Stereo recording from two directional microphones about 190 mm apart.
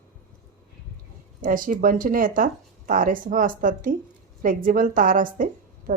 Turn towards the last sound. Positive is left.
turn(degrees=-45)  # may be behind; listen again after turning